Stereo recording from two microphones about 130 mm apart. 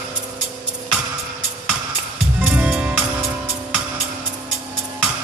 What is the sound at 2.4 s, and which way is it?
Music, 10° right (ahead or behind).